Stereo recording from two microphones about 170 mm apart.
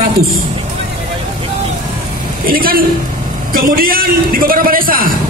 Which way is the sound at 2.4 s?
60° right (ahead or behind).